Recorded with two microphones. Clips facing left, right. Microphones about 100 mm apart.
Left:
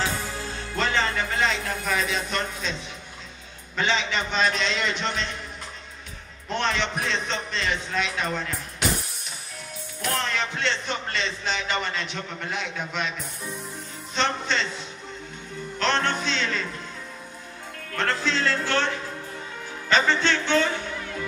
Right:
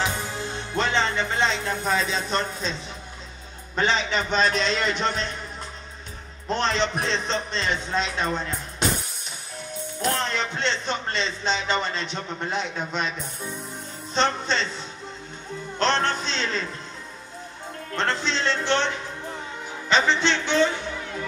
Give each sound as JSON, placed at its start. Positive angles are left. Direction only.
{"t": 0.0, "sound": "music", "side_deg": -20}
{"t": 3.7, "sound": "a man's voice", "side_deg": -35}
{"t": 6.5, "sound": "a man's voice", "side_deg": -35}
{"t": 10.0, "sound": "a man's voice", "side_deg": -30}
{"t": 14.1, "sound": "a man's voice", "side_deg": -35}
{"t": 15.8, "sound": "a man's voice", "side_deg": -35}
{"t": 17.9, "sound": "a man's voice", "side_deg": -25}
{"t": 19.9, "sound": "a man's voice", "side_deg": -20}